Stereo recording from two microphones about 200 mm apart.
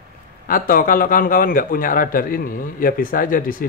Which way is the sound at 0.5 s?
45° left (ahead or behind).